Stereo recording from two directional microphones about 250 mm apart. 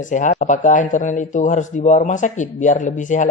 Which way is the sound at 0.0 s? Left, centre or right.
Left.